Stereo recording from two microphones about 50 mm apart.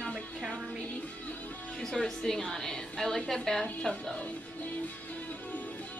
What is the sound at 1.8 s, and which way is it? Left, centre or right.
A woman's voice, centre.